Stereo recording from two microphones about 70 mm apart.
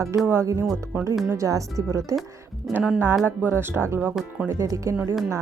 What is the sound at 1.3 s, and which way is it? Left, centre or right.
Speech, right.